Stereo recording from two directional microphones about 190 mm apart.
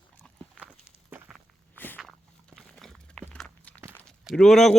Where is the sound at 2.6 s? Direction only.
Centre (ahead or behind).